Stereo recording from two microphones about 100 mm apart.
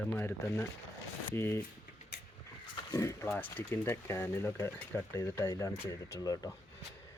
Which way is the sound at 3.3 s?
15° left (ahead or behind).